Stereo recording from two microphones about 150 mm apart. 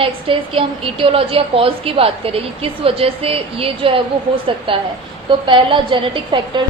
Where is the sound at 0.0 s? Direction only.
35° right (ahead or behind).